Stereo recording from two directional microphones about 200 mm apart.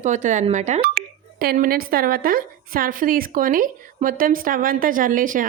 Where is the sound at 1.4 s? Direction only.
50° right (ahead or behind).